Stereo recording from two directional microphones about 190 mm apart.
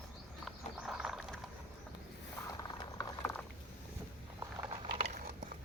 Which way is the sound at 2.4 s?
20° left (ahead or behind).